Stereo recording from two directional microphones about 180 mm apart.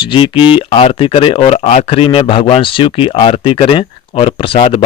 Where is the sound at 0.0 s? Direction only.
30° left (ahead or behind).